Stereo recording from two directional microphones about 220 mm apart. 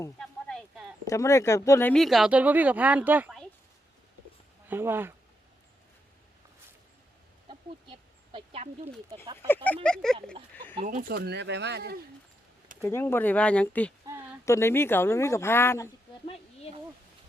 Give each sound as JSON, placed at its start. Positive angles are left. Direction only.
{"t": 0.2, "sound": "a sound", "side_deg": 0}
{"t": 1.0, "sound": "speech", "side_deg": 15}
{"t": 4.7, "sound": "speech", "side_deg": -10}
{"t": 7.4, "sound": "a sound", "side_deg": -20}
{"t": 9.2, "sound": "speech", "side_deg": -20}
{"t": 9.6, "sound": "speech", "side_deg": 5}
{"t": 10.8, "sound": "speech", "side_deg": -35}
{"t": 12.8, "sound": "speech", "side_deg": 10}